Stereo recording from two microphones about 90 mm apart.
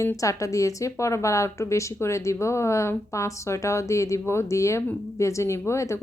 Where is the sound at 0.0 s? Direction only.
35° left (ahead or behind).